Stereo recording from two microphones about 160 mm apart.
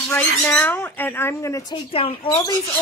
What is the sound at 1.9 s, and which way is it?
Speech, 35° left (ahead or behind).